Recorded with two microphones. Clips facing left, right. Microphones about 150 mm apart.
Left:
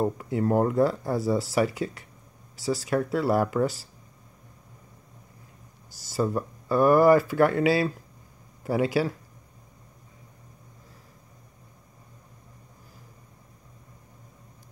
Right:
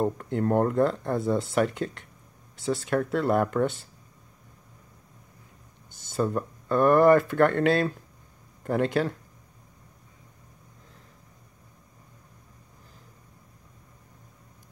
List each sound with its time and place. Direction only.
0.0 s speech: 5° left (ahead or behind)
5.9 s speech: centre (ahead or behind)